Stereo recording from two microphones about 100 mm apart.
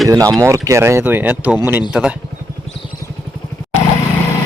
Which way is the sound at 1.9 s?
10° right (ahead or behind).